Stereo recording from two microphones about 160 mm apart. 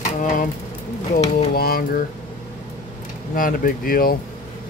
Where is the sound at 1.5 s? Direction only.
75° left (ahead or behind).